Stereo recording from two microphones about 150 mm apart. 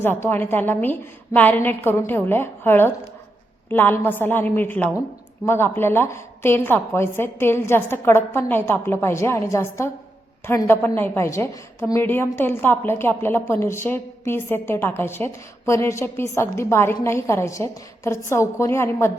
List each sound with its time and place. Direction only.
0.0 s a woman's voice: 15° left (ahead or behind)